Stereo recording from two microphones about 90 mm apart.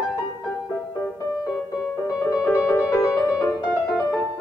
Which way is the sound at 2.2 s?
30° left (ahead or behind).